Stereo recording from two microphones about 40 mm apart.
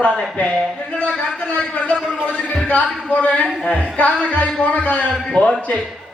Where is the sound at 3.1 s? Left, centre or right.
Left.